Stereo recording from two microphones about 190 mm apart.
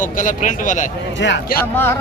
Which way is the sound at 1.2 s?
70° left (ahead or behind).